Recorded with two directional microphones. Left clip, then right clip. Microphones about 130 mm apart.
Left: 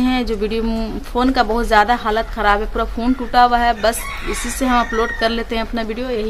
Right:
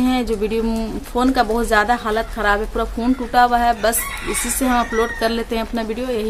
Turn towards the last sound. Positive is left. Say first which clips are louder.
# even
turn(degrees=-20)  # may be behind; listen again after turning